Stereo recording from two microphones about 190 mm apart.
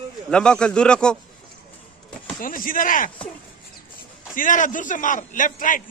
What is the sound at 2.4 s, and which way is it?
Speech, 45° left (ahead or behind).